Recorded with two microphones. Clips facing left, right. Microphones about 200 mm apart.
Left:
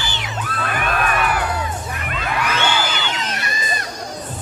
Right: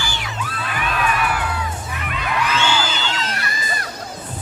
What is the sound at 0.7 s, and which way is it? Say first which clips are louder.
Children shouting: left 1 dB; 50° left (ahead or behind).